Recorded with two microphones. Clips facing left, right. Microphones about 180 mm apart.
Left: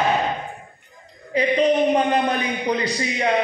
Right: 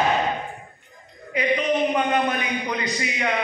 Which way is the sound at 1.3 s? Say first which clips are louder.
Left 4 dB; 35° left (ahead or behind).